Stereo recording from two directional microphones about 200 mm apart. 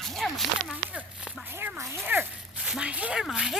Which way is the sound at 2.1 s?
5° right (ahead or behind).